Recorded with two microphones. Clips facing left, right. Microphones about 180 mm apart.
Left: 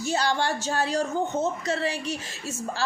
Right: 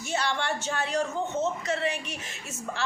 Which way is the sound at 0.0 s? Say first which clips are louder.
Left 4 dB; 35° left (ahead or behind).